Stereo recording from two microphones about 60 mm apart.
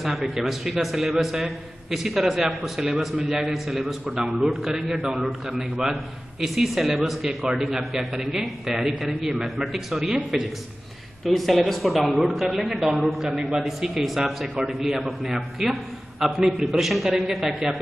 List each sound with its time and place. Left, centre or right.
0.2 s a man's voice: centre
0.5 s a man's voice: centre